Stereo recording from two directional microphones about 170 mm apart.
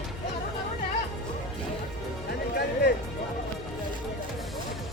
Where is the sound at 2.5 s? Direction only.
75° left (ahead or behind).